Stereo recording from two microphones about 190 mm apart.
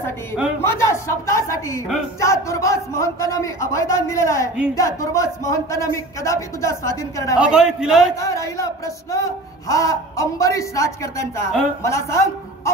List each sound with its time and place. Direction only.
0.6 s speech: 15° left (ahead or behind)
7.3 s a man's voice: 5° right (ahead or behind)
8.2 s a man's voice: 15° left (ahead or behind)